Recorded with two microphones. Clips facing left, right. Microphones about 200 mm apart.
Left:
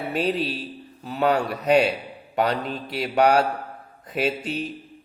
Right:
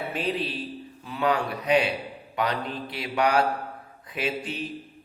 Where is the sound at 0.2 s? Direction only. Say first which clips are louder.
Left 5 dB; 40° left (ahead or behind).